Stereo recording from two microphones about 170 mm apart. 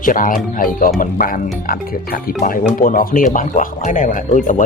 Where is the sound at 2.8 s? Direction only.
55° left (ahead or behind).